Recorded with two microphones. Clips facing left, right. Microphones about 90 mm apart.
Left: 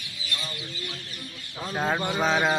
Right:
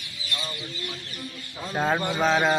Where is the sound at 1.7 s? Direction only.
5° right (ahead or behind).